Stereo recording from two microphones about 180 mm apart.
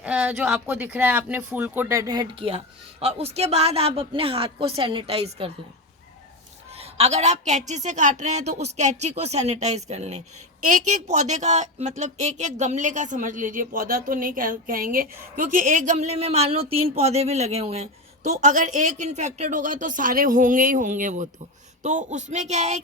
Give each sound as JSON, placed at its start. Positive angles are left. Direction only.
{"t": 0.0, "sound": "a woman's voice", "side_deg": -5}
{"t": 6.7, "sound": "a woman's voice", "side_deg": -35}